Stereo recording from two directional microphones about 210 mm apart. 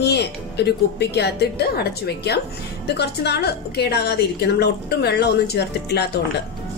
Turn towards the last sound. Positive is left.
turn(degrees=50)  # may be behind; listen again after turning